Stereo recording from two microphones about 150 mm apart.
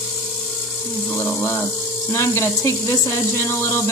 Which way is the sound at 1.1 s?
15° left (ahead or behind).